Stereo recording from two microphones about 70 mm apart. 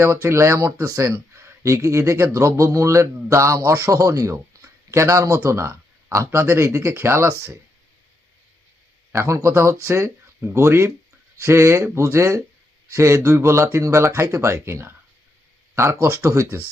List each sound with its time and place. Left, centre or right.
0.0 s speech: right
0.8 s speech: right
1.1 s speech: right
9.1 s speech: right